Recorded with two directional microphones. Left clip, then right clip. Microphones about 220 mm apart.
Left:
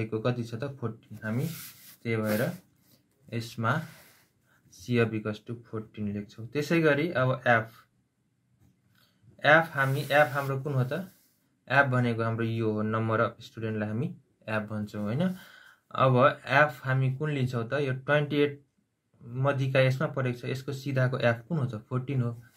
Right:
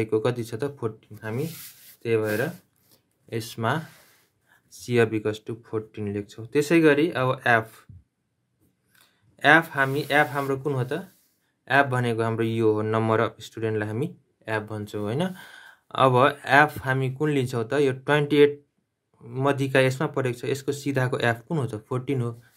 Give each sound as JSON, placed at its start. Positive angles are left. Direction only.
{"t": 0.0, "sound": "speech", "side_deg": -40}
{"t": 8.9, "sound": "speech", "side_deg": -45}